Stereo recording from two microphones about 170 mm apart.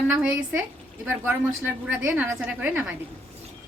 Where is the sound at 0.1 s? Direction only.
5° right (ahead or behind).